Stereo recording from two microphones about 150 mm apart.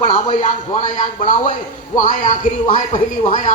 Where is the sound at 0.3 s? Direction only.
55° left (ahead or behind).